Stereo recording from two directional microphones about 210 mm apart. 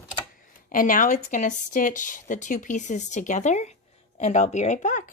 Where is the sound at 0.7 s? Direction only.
40° left (ahead or behind).